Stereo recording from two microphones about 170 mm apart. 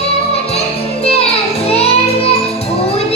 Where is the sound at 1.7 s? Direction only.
35° left (ahead or behind).